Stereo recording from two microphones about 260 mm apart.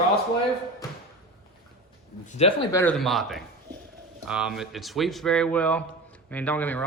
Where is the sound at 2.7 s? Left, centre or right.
Centre.